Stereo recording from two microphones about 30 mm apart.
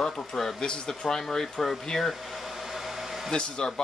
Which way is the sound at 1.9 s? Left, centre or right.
Centre.